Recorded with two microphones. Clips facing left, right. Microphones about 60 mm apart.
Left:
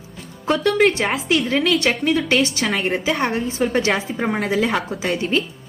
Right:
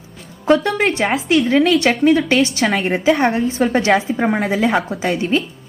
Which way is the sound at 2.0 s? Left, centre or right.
Right.